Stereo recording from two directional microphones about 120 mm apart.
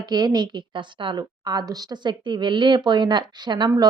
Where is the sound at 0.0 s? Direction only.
35° right (ahead or behind).